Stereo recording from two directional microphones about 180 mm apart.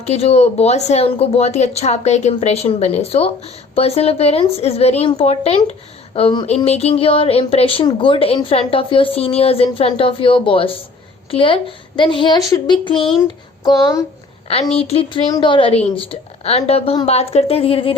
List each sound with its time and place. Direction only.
0.0 s a woman's voice: 35° left (ahead or behind)